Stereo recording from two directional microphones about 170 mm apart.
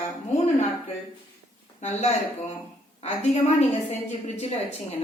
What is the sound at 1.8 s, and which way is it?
A woman's voice, 40° left (ahead or behind).